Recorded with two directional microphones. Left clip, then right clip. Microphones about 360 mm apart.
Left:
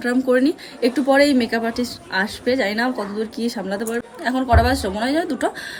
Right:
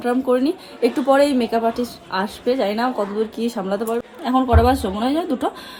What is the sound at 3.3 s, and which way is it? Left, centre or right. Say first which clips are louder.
Speech: right 1 dB; right.